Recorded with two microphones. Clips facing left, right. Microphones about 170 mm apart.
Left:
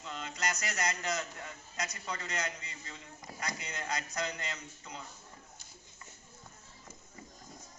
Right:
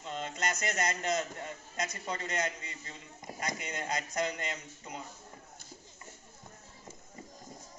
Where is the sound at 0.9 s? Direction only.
25° right (ahead or behind).